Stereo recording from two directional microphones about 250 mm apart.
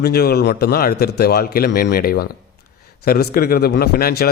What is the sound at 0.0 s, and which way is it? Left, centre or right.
Speech, left.